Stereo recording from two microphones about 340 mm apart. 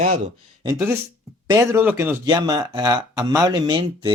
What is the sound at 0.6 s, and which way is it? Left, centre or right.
Speech, centre.